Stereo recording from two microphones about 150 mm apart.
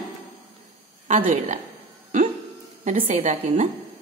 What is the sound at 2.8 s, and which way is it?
Speech, 40° right (ahead or behind).